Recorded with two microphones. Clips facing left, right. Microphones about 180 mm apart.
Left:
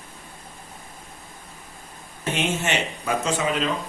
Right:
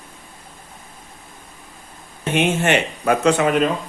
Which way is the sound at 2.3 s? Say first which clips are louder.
Right 7 dB; 60° right (ahead or behind).